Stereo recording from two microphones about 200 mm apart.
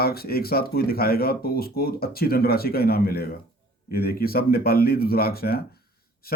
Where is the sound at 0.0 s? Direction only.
50° left (ahead or behind).